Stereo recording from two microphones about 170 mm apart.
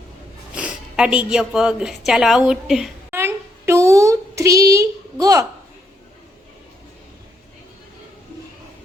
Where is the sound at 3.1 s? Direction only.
15° right (ahead or behind).